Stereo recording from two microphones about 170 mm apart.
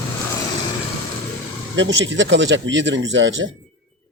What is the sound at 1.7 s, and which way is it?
Speech, 90° right.